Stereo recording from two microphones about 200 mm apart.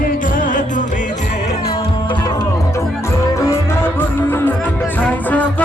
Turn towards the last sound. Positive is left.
turn(degrees=5)  # may be behind; listen again after turning